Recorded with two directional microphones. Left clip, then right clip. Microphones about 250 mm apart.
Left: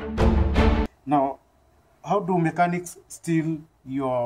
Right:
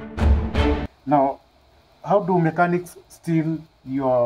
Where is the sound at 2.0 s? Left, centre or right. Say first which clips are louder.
Right 4 dB; centre.